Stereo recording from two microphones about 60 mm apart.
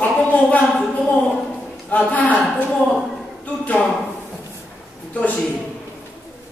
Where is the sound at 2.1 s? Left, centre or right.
Left.